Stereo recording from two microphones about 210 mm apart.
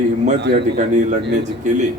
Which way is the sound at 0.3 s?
55° right (ahead or behind).